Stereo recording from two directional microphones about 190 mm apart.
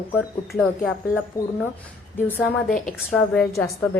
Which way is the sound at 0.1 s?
10° left (ahead or behind).